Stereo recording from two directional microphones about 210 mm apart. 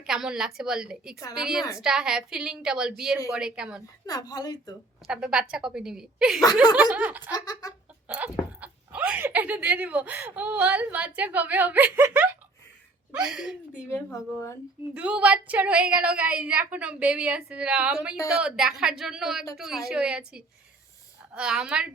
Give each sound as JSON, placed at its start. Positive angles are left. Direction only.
{"t": 0.0, "sound": "a woman's voice", "side_deg": -5}
{"t": 4.0, "sound": "speech", "side_deg": 15}
{"t": 5.0, "sound": "a woman's voice", "side_deg": -5}
{"t": 6.4, "sound": "speech", "side_deg": 20}
{"t": 6.9, "sound": "a woman's voice", "side_deg": -5}
{"t": 7.3, "sound": "speech", "side_deg": 20}
{"t": 8.0, "sound": "a woman's voice", "side_deg": -5}
{"t": 13.9, "sound": "speech", "side_deg": 10}
{"t": 14.9, "sound": "a woman's voice", "side_deg": -5}